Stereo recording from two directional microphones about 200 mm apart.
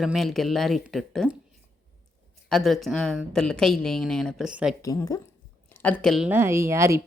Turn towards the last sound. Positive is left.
turn(degrees=-15)  # may be behind; listen again after turning